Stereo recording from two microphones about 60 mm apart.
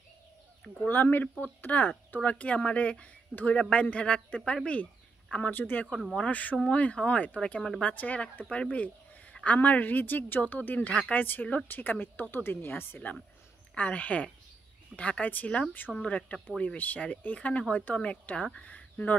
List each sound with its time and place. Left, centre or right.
0.8 s speech: left
11.6 s speech: left
13.7 s speech: left